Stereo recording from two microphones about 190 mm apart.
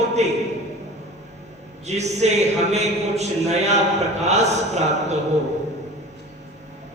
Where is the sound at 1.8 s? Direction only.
35° right (ahead or behind).